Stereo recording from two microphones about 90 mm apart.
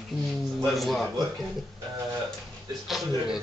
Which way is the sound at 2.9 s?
Centre (ahead or behind).